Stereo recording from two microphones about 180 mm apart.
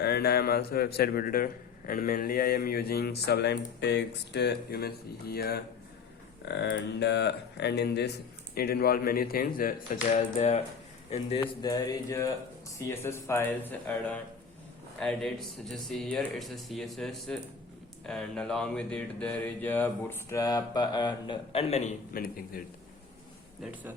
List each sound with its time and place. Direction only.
0.0 s speech: 65° left (ahead or behind)
6.4 s speech: 70° left (ahead or behind); by 10.6 s 40° left (ahead or behind)
11.6 s mantra: 20° left (ahead or behind)
12.9 s speech: 15° left (ahead or behind); by 21.9 s 40° left (ahead or behind)
22.1 s a man's voice: 50° left (ahead or behind)